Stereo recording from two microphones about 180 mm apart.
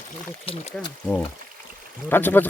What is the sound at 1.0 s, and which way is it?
Speech, 5° left (ahead or behind).